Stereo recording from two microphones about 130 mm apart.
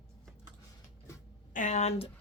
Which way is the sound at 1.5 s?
70° left (ahead or behind).